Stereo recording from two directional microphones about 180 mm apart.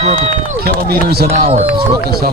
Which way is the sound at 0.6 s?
60° right (ahead or behind).